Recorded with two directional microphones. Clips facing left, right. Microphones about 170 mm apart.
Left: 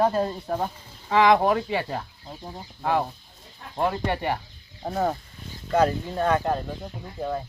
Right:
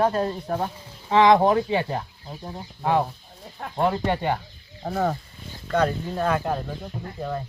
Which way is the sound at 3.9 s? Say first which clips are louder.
Right 2 dB; 20° right (ahead or behind).